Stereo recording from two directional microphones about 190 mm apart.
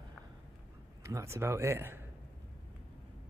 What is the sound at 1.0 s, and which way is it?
Speech, 15° right (ahead or behind).